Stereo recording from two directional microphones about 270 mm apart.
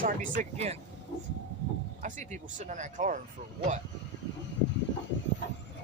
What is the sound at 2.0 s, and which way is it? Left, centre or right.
Speech, right.